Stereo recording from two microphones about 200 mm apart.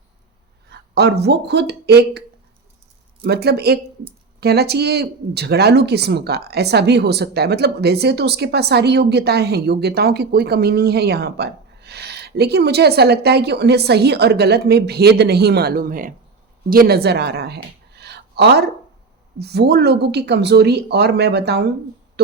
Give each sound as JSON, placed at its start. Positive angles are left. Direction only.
{"t": 0.7, "sound": "speech", "side_deg": -55}
{"t": 3.2, "sound": "a woman's voice", "side_deg": -55}